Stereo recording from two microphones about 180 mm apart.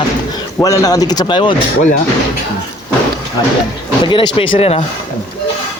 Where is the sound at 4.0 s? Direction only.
25° left (ahead or behind).